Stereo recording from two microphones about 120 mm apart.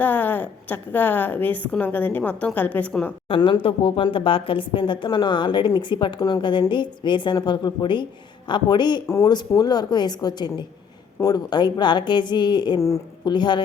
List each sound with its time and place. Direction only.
0.0 s a woman's voice: 15° left (ahead or behind)
3.2 s a woman's voice: 45° left (ahead or behind)
9.0 s a woman's voice: 25° left (ahead or behind)
12.8 s a woman's voice: 25° left (ahead or behind)
13.3 s a woman's voice: 40° left (ahead or behind)